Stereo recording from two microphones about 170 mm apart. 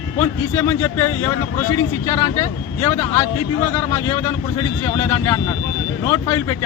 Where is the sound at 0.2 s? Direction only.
15° left (ahead or behind).